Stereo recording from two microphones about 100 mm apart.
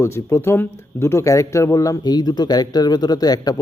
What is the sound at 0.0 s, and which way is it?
Speech, 30° left (ahead or behind).